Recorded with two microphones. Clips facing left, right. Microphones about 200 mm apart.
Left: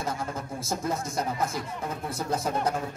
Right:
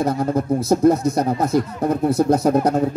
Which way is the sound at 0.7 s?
65° right (ahead or behind).